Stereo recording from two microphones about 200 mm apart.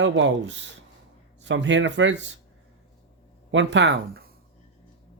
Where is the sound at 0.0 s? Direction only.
65° right (ahead or behind).